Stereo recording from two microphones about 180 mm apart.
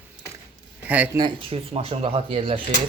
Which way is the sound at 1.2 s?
30° right (ahead or behind).